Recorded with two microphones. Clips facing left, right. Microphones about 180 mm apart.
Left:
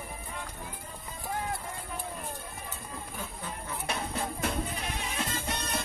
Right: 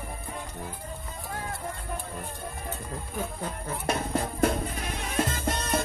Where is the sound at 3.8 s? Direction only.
55° right (ahead or behind).